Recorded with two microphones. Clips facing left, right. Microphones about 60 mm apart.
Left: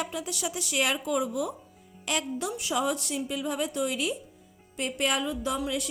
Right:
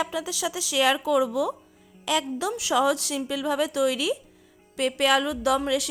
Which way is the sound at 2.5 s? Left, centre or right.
Right.